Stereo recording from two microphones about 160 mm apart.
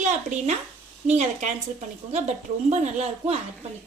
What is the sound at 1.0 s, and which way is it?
A woman's voice, 45° right (ahead or behind).